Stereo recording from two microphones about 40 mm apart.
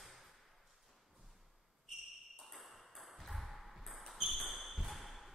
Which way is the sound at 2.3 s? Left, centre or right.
Centre.